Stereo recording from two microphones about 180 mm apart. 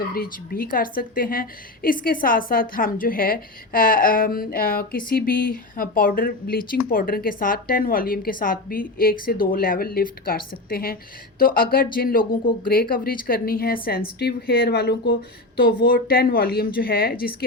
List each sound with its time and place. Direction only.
0.1 s a woman's voice: 55° left (ahead or behind)